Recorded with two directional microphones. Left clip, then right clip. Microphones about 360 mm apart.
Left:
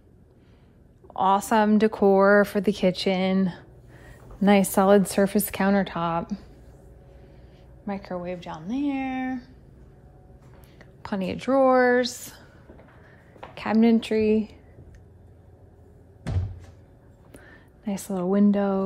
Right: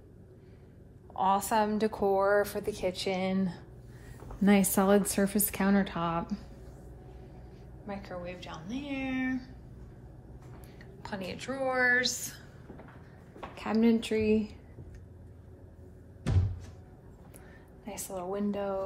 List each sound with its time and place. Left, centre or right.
1.1 s a woman's voice: centre
7.8 s speech: centre
10.8 s a woman's voice: centre
13.6 s a woman's voice: left
17.8 s a woman's voice: left